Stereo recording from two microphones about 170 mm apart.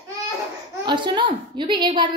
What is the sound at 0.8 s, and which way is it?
A woman's voice, 25° right (ahead or behind).